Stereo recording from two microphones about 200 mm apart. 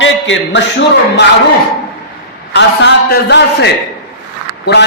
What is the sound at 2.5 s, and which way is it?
A man's voice, 55° left (ahead or behind).